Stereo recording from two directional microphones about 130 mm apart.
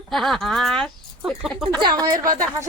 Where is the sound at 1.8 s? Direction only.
30° right (ahead or behind).